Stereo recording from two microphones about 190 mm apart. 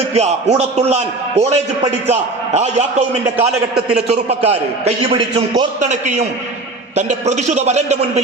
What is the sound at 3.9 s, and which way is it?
A man's voice, 35° right (ahead or behind).